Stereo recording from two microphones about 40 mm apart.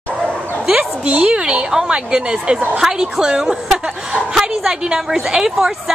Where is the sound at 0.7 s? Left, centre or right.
Right.